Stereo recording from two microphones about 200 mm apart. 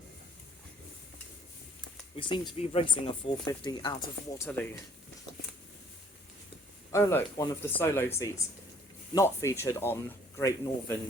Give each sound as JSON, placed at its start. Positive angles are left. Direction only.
{"t": 2.1, "sound": "speech", "side_deg": 25}
{"t": 6.9, "sound": "speech", "side_deg": 15}